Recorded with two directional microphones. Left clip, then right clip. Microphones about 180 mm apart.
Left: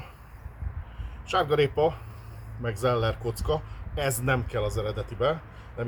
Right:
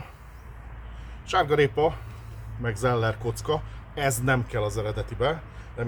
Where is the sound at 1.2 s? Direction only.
35° right (ahead or behind).